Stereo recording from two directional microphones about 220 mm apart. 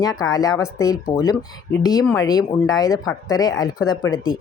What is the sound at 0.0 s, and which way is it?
Speech, 15° left (ahead or behind).